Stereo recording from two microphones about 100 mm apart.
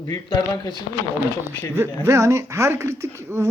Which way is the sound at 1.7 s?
25° right (ahead or behind).